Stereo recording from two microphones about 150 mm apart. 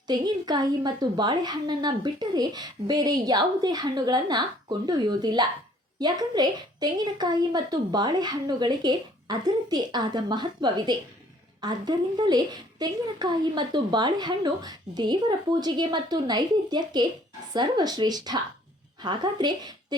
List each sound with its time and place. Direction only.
0.1 s a woman's voice: 30° right (ahead or behind)